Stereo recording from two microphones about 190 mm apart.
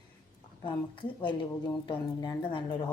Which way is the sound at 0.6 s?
25° left (ahead or behind).